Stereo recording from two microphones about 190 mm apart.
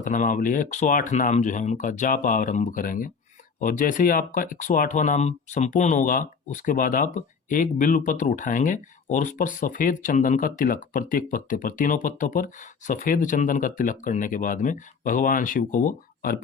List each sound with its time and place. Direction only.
0.0 s speech: 45° left (ahead or behind)